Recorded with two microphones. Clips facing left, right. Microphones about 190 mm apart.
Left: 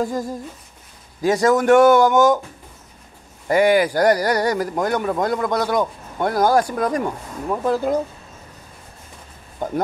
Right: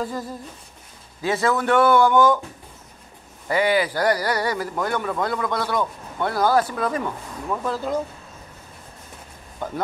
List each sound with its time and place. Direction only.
0.0 s speech: 45° left (ahead or behind)
3.4 s speech: 45° left (ahead or behind)